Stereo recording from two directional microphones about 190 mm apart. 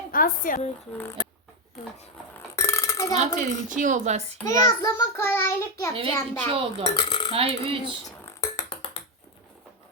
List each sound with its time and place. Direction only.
0.1 s speech: 45° left (ahead or behind)
2.6 s a sound: 15° left (ahead or behind)
3.2 s speech: 40° right (ahead or behind)
4.4 s child singing: 5° left (ahead or behind)
4.8 s child singing: 20° left (ahead or behind)
6.5 s speech: 30° right (ahead or behind)
6.9 s speech: 25° left (ahead or behind)
7.3 s speech: 30° right (ahead or behind)
8.2 s finger snapping: 15° left (ahead or behind)